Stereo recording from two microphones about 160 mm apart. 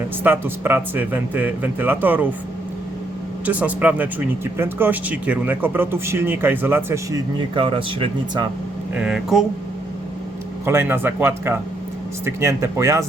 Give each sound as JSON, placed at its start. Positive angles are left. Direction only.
{"t": 0.2, "sound": "speech", "side_deg": -15}
{"t": 3.4, "sound": "speech", "side_deg": -10}
{"t": 9.0, "sound": "speech", "side_deg": -5}
{"t": 10.7, "sound": "speech", "side_deg": -15}